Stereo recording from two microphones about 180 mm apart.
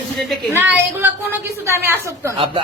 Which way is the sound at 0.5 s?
10° right (ahead or behind).